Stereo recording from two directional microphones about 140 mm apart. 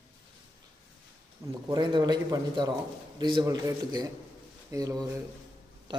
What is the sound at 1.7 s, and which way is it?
A man's voice, 30° right (ahead or behind).